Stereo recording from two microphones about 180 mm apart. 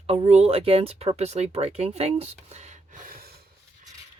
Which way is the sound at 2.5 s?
40° right (ahead or behind).